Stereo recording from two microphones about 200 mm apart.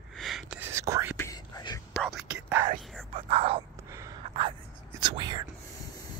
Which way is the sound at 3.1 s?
30° right (ahead or behind).